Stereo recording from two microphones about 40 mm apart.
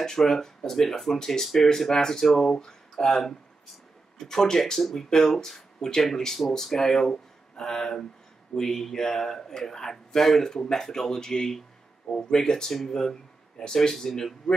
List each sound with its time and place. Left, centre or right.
0.0 s speech: centre